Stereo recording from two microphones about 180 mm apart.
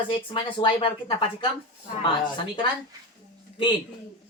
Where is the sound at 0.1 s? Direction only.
25° left (ahead or behind).